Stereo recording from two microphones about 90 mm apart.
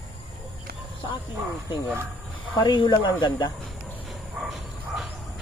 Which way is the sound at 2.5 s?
55° left (ahead or behind).